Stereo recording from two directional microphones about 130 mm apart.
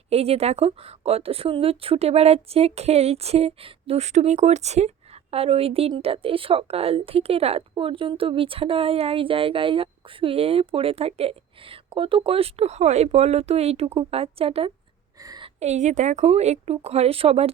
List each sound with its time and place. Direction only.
0.1 s a woman's voice: 50° right (ahead or behind)
15.2 s a sound: 30° right (ahead or behind)
15.6 s a woman's voice: 60° right (ahead or behind)